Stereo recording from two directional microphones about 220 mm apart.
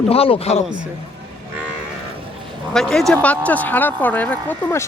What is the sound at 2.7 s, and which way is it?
Speech, centre (ahead or behind).